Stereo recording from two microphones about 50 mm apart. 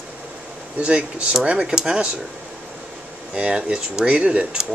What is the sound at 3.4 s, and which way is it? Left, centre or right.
Speech, right.